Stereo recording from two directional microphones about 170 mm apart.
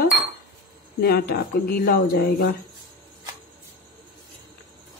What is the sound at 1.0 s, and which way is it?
Speech, 65° left (ahead or behind).